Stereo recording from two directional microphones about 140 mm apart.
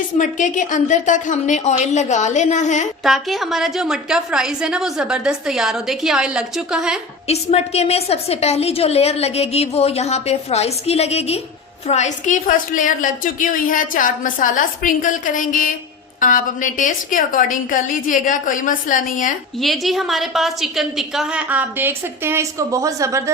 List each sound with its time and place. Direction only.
0.2 s a woman's voice: 65° left (ahead or behind)
3.0 s a woman's voice: centre (ahead or behind)
7.3 s a woman's voice: 50° left (ahead or behind); by 19.3 s 70° left (ahead or behind)
19.5 s a woman's voice: centre (ahead or behind); by 23.3 s 20° right (ahead or behind)